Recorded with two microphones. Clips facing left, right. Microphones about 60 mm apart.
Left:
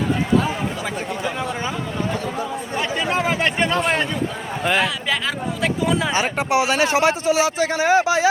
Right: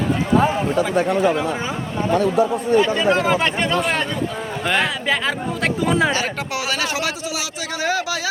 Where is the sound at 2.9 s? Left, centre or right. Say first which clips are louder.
Right 4 dB; centre.